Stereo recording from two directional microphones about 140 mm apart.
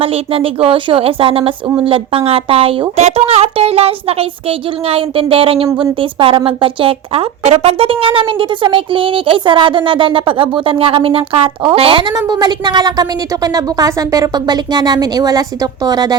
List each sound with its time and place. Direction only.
0.0 s a woman's voice: 45° right (ahead or behind)